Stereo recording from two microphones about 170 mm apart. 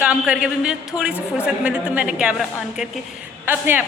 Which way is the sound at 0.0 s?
5° right (ahead or behind).